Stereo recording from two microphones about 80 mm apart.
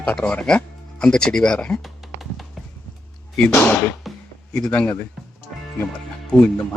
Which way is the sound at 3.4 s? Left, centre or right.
Centre.